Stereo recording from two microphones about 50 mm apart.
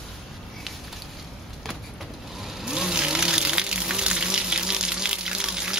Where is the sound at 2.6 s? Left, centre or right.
Centre.